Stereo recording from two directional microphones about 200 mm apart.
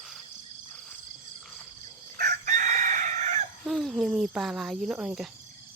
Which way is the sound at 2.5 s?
35° right (ahead or behind).